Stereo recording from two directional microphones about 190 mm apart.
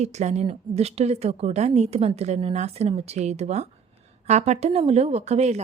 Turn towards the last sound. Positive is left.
turn(degrees=-35)  # may be behind; listen again after turning